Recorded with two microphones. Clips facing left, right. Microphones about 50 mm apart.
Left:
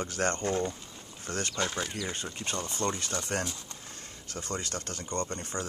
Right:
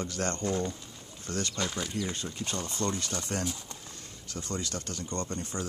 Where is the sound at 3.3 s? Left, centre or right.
Left.